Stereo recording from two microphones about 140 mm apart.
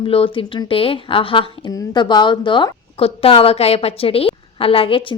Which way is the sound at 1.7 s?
30° left (ahead or behind).